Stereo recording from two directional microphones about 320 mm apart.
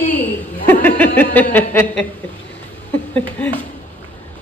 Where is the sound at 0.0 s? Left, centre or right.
Centre.